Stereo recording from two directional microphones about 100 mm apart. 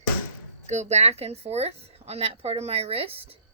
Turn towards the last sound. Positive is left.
turn(degrees=-75)  # may be behind; listen again after turning